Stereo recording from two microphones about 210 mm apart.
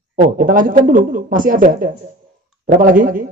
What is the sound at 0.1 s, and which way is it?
Speech, 40° right (ahead or behind).